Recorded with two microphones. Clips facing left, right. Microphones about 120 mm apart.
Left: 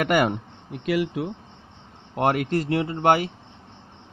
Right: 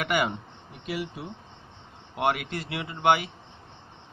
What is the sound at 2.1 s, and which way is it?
Speech, 40° left (ahead or behind).